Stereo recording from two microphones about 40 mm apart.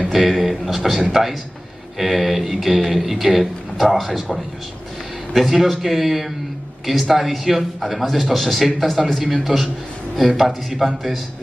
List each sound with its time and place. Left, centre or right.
0.1 s a man's voice: centre